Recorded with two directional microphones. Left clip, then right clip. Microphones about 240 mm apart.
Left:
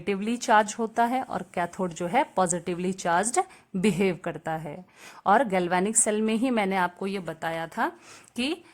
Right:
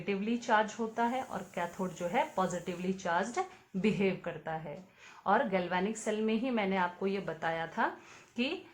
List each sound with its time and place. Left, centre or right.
0.0 s a woman's voice: left